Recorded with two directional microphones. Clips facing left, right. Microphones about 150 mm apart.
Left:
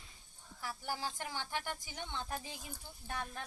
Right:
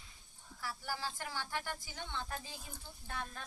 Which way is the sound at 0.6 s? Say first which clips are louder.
Left 1 dB; 20° left (ahead or behind).